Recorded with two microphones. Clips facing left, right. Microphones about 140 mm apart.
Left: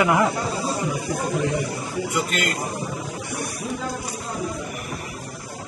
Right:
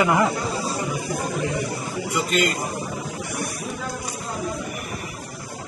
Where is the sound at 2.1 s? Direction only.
Centre (ahead or behind).